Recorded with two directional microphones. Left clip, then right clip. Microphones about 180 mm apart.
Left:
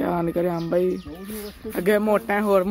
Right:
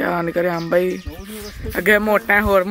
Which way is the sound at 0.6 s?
10° right (ahead or behind).